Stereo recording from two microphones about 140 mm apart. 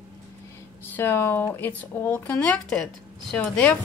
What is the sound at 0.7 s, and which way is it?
Speech, 15° left (ahead or behind).